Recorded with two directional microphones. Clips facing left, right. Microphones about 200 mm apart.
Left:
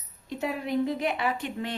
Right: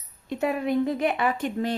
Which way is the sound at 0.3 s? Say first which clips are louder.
Right 5 dB; 55° right (ahead or behind).